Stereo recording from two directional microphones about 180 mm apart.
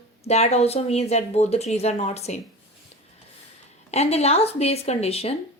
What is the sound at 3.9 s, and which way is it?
A woman's voice, 35° left (ahead or behind).